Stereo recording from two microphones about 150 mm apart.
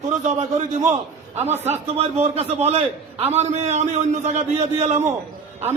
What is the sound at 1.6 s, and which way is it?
A man's voice, 45° right (ahead or behind).